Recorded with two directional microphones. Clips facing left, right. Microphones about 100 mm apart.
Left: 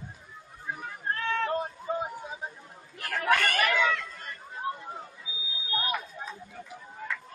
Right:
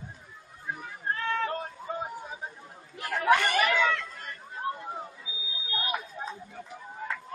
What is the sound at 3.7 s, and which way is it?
Chatter, centre (ahead or behind).